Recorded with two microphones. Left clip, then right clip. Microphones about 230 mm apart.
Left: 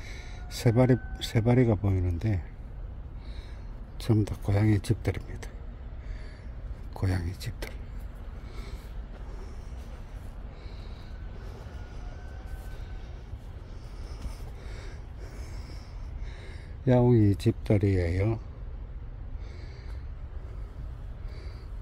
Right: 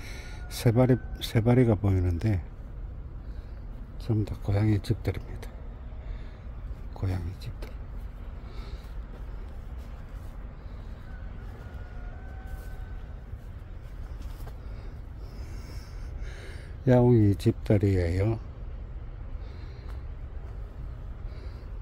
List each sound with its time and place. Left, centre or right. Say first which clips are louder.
0.0 s speech: right 1 dB; centre
4.2 s speech: left 2 dB; centre
6.9 s speech: left 3 dB; centre
16.8 s speech: right 1 dB; centre